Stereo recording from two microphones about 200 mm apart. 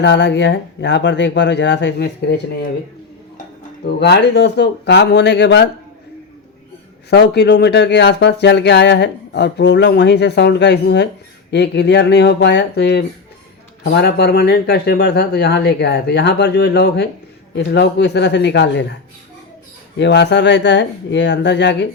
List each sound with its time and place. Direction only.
0.0 s speech: 60° left (ahead or behind)
3.8 s speech: 55° left (ahead or behind)
7.1 s speech: 55° left (ahead or behind)
20.0 s speech: 60° left (ahead or behind)